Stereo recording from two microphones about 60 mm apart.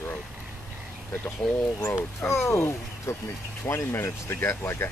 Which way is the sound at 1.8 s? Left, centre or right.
Left.